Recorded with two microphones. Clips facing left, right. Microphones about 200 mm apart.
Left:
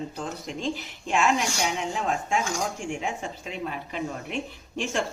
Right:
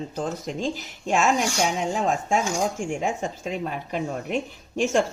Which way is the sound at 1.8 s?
45° right (ahead or behind).